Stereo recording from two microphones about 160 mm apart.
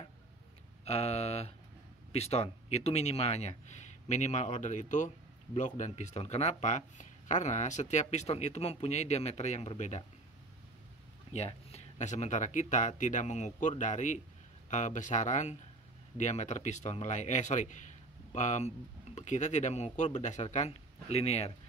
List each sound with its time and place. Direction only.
0.8 s speech: 40° left (ahead or behind)
11.3 s speech: 45° left (ahead or behind)